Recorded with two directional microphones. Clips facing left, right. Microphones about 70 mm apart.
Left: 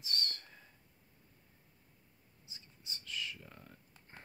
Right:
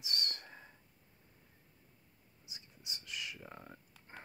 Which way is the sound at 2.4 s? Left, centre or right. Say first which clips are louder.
Right 1 dB; centre.